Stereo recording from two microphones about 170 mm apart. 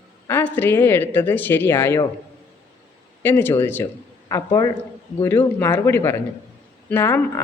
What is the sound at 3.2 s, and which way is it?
A man's voice, 15° left (ahead or behind).